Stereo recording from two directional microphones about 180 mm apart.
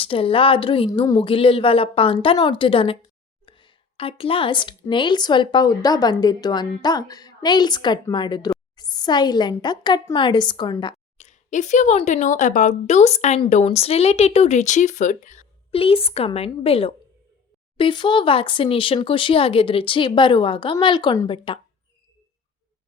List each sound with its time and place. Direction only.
0.0 s a woman's voice: 30° left (ahead or behind)
3.4 s a sound: 25° left (ahead or behind)
4.9 s a woman's voice: 25° left (ahead or behind)
11.2 s a woman's voice: 40° left (ahead or behind)